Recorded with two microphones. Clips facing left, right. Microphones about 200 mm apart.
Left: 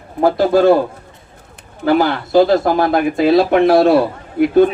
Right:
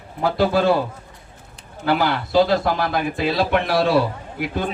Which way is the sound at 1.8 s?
50° left (ahead or behind).